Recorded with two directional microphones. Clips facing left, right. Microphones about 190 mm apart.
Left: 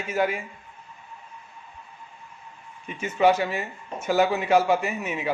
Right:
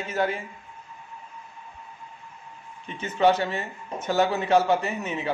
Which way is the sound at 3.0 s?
10° left (ahead or behind).